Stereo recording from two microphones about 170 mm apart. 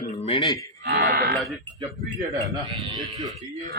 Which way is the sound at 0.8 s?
65° right (ahead or behind).